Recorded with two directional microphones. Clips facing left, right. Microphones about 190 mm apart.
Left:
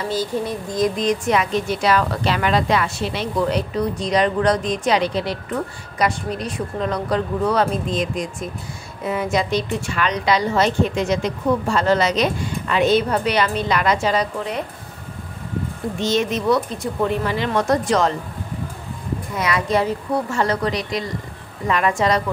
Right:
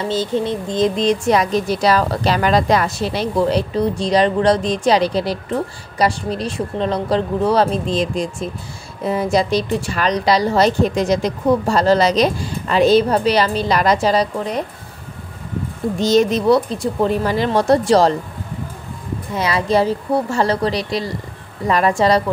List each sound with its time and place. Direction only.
0.1 s speech: 25° right (ahead or behind)
16.0 s speech: 35° right (ahead or behind)
19.3 s speech: 30° right (ahead or behind)